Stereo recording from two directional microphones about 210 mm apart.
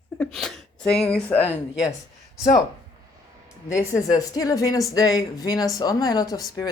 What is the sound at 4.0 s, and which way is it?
Speech, 15° left (ahead or behind).